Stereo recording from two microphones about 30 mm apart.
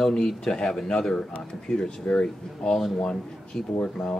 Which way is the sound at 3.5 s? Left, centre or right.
Left.